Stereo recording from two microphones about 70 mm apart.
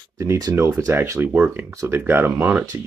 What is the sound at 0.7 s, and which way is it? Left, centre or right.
Speech, right.